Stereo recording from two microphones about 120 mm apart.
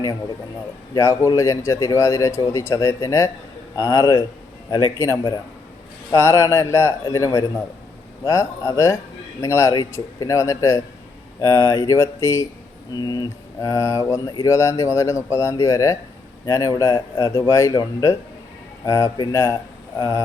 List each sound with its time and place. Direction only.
0.9 s a man's voice: 25° left (ahead or behind)
12.9 s a man's voice: 35° left (ahead or behind)